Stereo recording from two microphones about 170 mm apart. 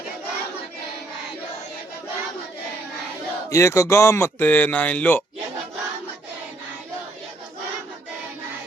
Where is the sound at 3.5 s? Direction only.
15° left (ahead or behind).